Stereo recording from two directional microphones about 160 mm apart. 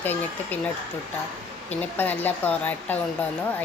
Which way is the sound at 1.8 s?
10° left (ahead or behind).